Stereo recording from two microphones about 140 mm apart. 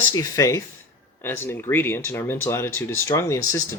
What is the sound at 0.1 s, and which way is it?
Speech, 25° left (ahead or behind).